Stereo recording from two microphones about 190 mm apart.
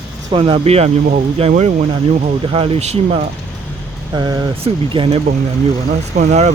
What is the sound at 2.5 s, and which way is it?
Speech, 30° right (ahead or behind).